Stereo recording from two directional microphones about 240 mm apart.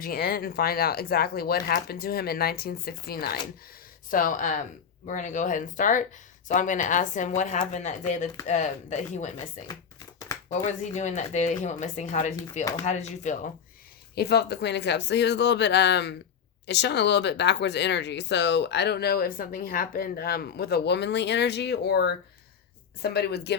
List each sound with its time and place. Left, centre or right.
0.0 s speech: left
10.7 s speech: left
14.2 s speech: left